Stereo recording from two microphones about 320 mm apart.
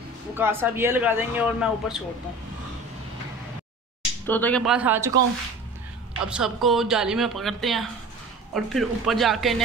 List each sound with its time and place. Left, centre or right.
0.3 s speech: centre
4.3 s speech: centre
6.2 s speech: centre